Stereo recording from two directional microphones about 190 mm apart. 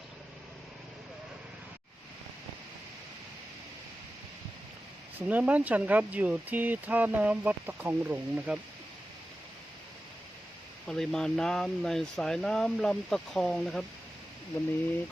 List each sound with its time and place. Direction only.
5.3 s speech: 5° right (ahead or behind)
10.8 s speech: centre (ahead or behind)